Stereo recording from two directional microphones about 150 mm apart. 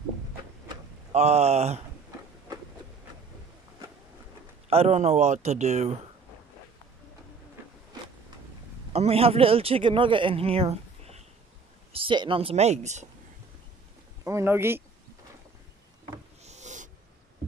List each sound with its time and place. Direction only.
1.1 s speech: 45° right (ahead or behind)
4.6 s speech: 45° right (ahead or behind)
8.9 s speech: 40° right (ahead or behind)
14.2 s speech: 15° right (ahead or behind)
16.4 s snort: 50° right (ahead or behind)